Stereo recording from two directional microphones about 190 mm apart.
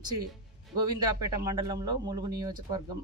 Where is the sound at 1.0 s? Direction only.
20° right (ahead or behind).